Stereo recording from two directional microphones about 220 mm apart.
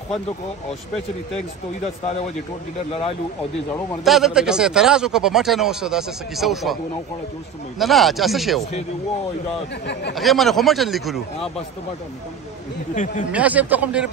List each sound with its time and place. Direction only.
4.0 s speech: centre (ahead or behind)
7.8 s speech: centre (ahead or behind)
10.1 s speech: centre (ahead or behind)
12.9 s speech: 35° left (ahead or behind)
13.3 s speech: 5° right (ahead or behind)